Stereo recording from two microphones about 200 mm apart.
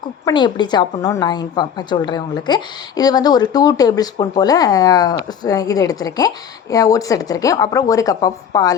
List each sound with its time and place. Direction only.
0.3 s a woman's voice: 20° left (ahead or behind)